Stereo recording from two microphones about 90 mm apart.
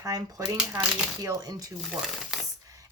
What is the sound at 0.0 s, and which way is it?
Speech, 40° right (ahead or behind).